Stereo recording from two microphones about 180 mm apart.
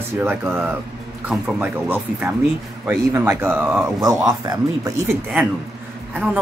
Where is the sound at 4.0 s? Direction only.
20° right (ahead or behind).